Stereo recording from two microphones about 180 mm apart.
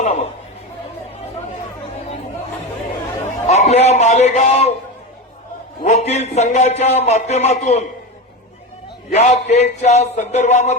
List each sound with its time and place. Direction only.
0.0 s speech: 35° left (ahead or behind)
3.4 s a man's voice: 40° left (ahead or behind)
5.8 s a man's voice: 40° left (ahead or behind)
9.1 s a man's voice: 40° left (ahead or behind)